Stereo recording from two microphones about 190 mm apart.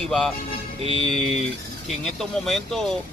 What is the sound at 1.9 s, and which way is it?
Speech, centre (ahead or behind).